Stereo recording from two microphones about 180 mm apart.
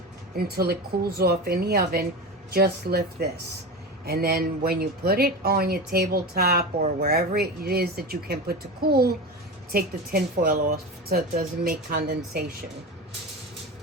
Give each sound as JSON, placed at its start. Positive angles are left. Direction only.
{"t": 0.3, "sound": "speech", "side_deg": -60}